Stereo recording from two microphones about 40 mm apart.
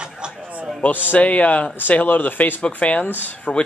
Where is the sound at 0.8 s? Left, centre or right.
Left.